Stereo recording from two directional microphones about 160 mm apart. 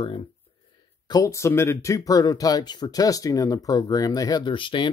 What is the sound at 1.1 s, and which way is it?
Speech, 20° left (ahead or behind).